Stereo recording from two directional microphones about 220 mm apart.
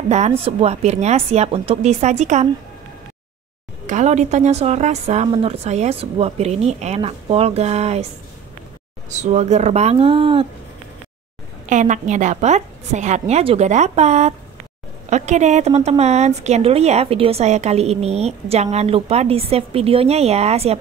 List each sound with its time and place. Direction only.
0.5 s a woman's voice: 30° right (ahead or behind)
3.8 s a woman's voice: 30° right (ahead or behind)
9.1 s a woman's voice: 30° right (ahead or behind)
11.7 s a woman's voice: 35° right (ahead or behind)